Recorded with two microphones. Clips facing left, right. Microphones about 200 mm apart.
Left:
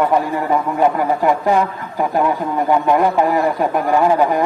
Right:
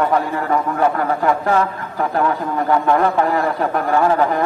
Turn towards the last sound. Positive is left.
turn(degrees=15)  # may be behind; listen again after turning